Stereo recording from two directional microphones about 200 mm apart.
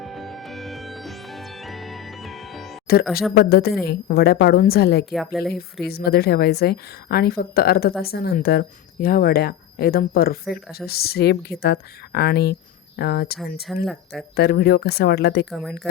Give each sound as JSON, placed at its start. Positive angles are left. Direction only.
{"t": 0.0, "sound": "music", "side_deg": 0}
{"t": 2.8, "sound": "speech", "side_deg": 50}
{"t": 5.1, "sound": "speech", "side_deg": 0}
{"t": 5.8, "sound": "speech", "side_deg": 50}
{"t": 13.4, "sound": "speech", "side_deg": 0}
{"t": 14.3, "sound": "speech", "side_deg": 55}
{"t": 15.4, "sound": "speech", "side_deg": 0}